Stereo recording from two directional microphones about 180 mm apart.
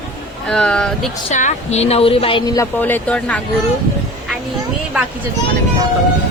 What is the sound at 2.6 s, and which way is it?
Speech, 10° left (ahead or behind).